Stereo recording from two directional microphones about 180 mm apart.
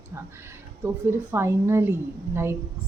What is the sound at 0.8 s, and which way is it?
Speech, 15° right (ahead or behind).